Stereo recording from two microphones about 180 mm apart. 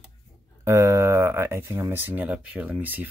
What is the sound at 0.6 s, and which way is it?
Speech, 15° right (ahead or behind).